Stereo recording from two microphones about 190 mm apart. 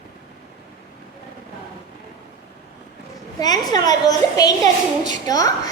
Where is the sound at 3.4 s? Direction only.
20° left (ahead or behind).